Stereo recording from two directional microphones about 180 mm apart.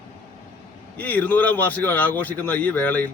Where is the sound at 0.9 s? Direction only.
10° left (ahead or behind).